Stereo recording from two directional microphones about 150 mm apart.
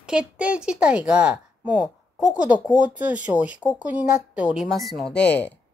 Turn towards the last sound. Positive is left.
turn(degrees=10)  # may be behind; listen again after turning